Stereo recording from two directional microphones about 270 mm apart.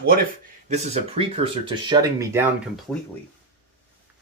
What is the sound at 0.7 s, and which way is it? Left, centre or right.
Speech, right.